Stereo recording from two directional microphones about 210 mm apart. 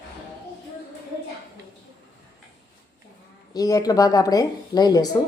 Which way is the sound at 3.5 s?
15° left (ahead or behind).